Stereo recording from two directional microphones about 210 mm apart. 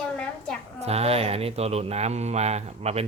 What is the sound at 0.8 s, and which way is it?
Speech, 30° right (ahead or behind).